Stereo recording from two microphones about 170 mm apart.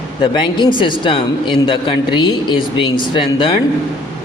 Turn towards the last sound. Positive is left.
turn(degrees=30)  # may be behind; listen again after turning